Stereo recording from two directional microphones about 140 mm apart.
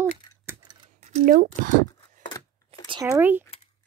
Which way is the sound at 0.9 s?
55° right (ahead or behind).